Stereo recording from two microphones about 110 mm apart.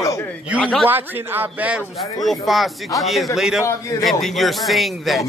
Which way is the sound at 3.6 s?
25° left (ahead or behind).